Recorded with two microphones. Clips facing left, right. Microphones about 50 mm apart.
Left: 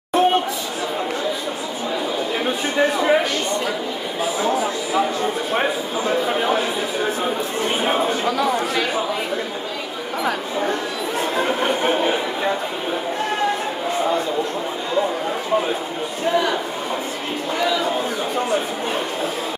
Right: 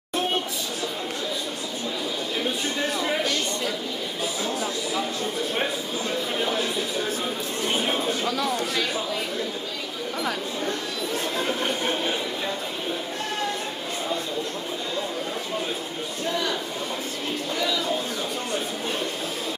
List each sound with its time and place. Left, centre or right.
0.2 s chatter: centre
2.4 s speech: left
4.9 s speech: left
10.2 s speech: left
16.3 s speech: left
17.6 s a man's voice: left